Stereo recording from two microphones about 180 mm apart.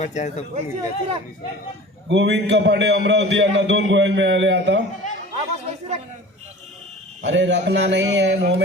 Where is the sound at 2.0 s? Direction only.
80° right.